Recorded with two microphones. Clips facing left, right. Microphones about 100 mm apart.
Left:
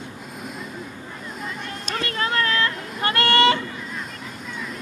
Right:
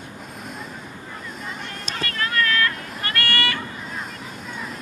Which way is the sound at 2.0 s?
25° left (ahead or behind).